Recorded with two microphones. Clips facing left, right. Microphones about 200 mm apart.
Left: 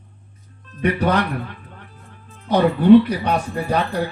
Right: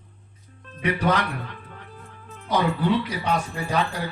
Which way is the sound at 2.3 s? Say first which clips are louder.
Left 6 dB; 60° left (ahead or behind).